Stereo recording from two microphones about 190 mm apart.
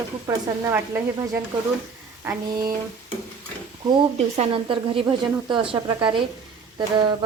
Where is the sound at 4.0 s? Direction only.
35° right (ahead or behind).